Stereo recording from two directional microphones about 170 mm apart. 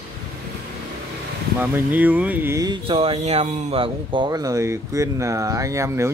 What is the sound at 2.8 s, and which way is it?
Speech, 35° right (ahead or behind).